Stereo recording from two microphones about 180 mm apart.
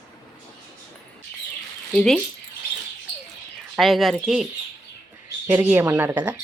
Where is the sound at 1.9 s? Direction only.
5° left (ahead or behind).